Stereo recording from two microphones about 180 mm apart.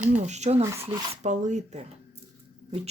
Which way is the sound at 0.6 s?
15° right (ahead or behind).